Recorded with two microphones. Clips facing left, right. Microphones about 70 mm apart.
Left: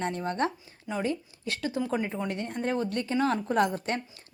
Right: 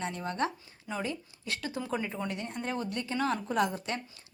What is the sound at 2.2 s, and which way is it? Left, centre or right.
A woman's voice, left.